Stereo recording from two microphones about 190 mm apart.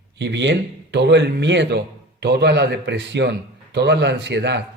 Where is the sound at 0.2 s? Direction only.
70° right (ahead or behind).